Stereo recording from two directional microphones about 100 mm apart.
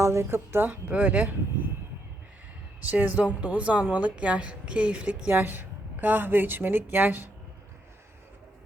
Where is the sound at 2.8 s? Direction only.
15° right (ahead or behind).